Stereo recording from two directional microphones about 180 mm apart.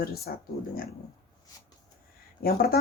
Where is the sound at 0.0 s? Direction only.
60° left (ahead or behind).